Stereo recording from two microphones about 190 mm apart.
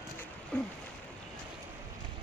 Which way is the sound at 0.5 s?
5° left (ahead or behind).